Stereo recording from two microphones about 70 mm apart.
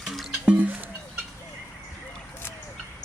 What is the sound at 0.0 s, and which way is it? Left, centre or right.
Music, centre.